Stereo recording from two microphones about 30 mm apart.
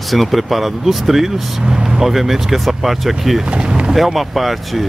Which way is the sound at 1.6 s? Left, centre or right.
Right.